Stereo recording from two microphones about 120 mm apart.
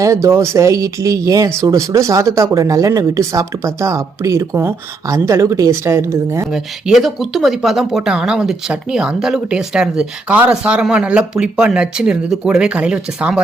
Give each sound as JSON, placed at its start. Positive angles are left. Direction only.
{"t": 0.0, "sound": "speech", "side_deg": -25}
{"t": 6.5, "sound": "speech", "side_deg": -5}